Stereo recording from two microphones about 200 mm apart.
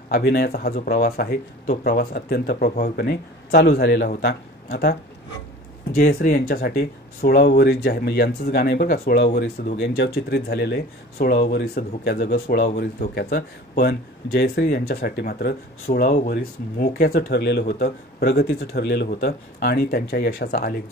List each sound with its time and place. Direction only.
0.1 s speech: 50° left (ahead or behind)
5.9 s speech: 50° left (ahead or behind)